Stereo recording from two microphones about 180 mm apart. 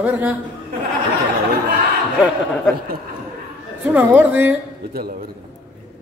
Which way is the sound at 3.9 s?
10° right (ahead or behind).